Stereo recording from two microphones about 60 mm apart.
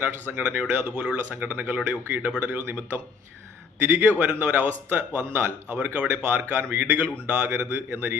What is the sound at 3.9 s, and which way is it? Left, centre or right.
Speech, right.